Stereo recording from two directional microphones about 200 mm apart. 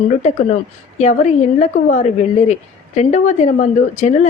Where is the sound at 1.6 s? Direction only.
35° left (ahead or behind).